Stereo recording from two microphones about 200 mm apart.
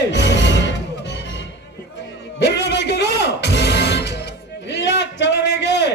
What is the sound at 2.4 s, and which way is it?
Music, 60° left (ahead or behind).